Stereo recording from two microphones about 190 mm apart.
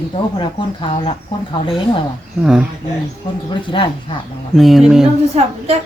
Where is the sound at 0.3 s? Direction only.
25° left (ahead or behind).